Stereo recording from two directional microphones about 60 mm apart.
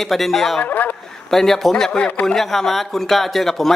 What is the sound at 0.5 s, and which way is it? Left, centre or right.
Speech, left.